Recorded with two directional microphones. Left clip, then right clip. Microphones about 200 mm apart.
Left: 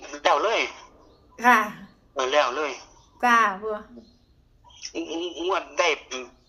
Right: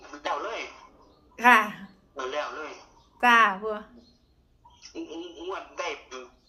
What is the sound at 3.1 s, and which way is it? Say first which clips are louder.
Speech: even; centre (ahead or behind).